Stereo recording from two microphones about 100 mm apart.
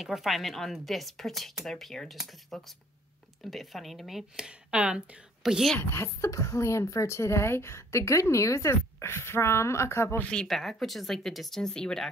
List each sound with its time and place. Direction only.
0.0 s a woman's voice: centre (ahead or behind)
5.8 s a woman's voice: 25° left (ahead or behind)
10.3 s a woman's voice: 5° left (ahead or behind)